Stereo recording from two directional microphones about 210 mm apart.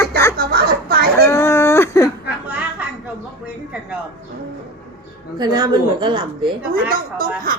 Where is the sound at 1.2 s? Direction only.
10° left (ahead or behind).